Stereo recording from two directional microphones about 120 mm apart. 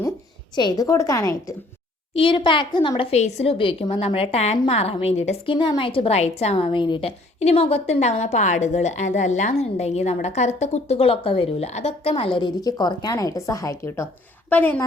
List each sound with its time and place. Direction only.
0.5 s a woman's voice: 35° left (ahead or behind)
2.1 s a woman's voice: 45° left (ahead or behind)
3.1 s a woman's voice: 65° left (ahead or behind)
5.5 s a woman's voice: 40° left (ahead or behind)
7.3 s a woman's voice: 60° left (ahead or behind); by 14.1 s 25° left (ahead or behind)
14.5 s a woman's voice: 15° left (ahead or behind)